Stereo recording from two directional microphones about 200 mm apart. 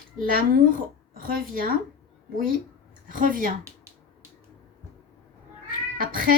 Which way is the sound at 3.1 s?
45° right (ahead or behind).